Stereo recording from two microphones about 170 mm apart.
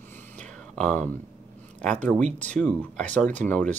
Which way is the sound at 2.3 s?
10° left (ahead or behind).